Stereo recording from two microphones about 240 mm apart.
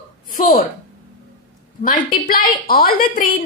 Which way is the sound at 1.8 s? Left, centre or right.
Left.